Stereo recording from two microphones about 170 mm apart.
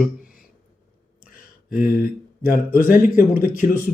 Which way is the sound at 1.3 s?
55° left (ahead or behind).